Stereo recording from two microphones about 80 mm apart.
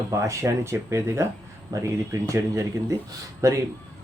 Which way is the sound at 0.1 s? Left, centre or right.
Right.